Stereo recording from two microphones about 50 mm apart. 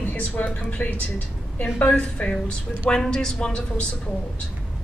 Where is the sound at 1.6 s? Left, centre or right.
Left.